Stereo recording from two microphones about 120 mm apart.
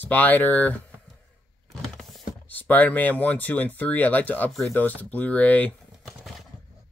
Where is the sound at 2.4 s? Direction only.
15° left (ahead or behind).